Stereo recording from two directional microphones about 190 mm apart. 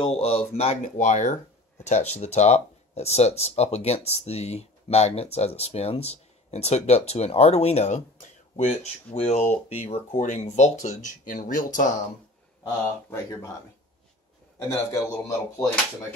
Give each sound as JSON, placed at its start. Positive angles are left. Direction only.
{"t": 0.0, "sound": "speech", "side_deg": 30}
{"t": 12.6, "sound": "speech", "side_deg": 15}
{"t": 14.7, "sound": "speech", "side_deg": 15}